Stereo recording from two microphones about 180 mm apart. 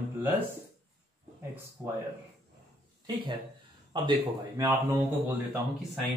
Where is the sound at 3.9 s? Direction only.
25° right (ahead or behind).